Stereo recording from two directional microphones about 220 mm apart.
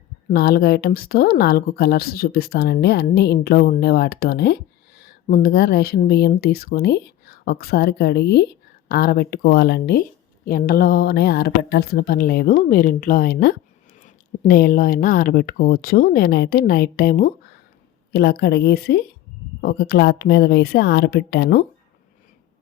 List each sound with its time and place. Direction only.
0.3 s speech: 45° left (ahead or behind)